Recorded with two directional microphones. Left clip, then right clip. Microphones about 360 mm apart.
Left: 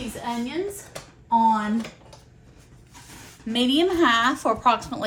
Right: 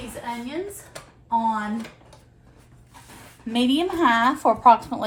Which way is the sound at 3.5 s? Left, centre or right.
Centre.